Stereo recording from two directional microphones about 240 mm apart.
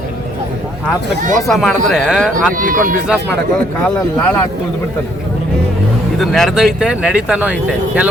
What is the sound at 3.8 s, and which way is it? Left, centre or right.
Speech, centre.